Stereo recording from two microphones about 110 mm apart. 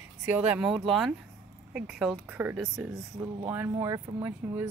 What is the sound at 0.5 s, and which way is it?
Speech, 5° right (ahead or behind).